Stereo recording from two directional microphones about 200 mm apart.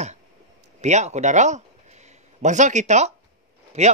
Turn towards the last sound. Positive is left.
turn(degrees=-35)  # may be behind; listen again after turning